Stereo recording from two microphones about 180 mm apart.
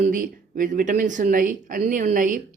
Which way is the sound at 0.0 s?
50° right (ahead or behind).